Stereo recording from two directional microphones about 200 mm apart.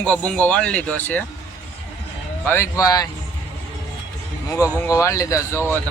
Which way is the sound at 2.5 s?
15° left (ahead or behind).